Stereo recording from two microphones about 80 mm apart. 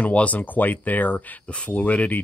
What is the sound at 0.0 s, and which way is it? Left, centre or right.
Speech, centre.